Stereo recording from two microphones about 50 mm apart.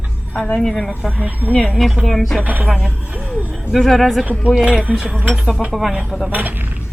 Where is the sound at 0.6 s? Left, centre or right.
Centre.